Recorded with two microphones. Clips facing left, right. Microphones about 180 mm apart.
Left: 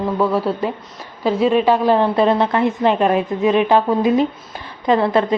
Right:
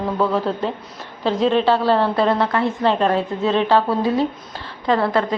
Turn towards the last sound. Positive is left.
turn(degrees=20)  # may be behind; listen again after turning